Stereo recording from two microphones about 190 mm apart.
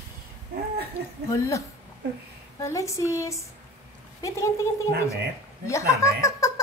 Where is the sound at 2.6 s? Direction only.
15° left (ahead or behind).